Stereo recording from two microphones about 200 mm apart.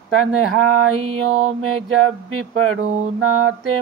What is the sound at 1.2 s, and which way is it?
Mantra, 90° right.